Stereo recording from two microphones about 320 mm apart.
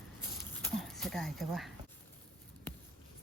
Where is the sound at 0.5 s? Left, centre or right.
Centre.